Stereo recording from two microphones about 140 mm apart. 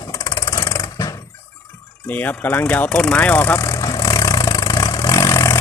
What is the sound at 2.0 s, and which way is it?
Vehicle, 10° left (ahead or behind).